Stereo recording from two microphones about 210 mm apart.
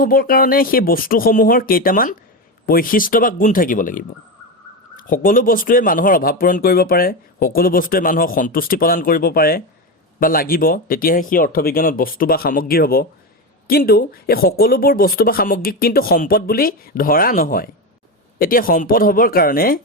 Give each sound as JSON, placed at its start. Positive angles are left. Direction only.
{"t": 0.0, "sound": "speech", "side_deg": 45}